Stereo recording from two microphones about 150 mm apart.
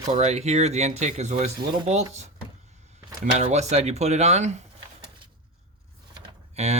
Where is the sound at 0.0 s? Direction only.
50° right (ahead or behind).